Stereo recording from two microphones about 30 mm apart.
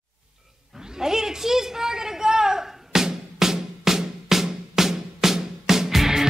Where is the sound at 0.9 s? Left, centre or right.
Centre.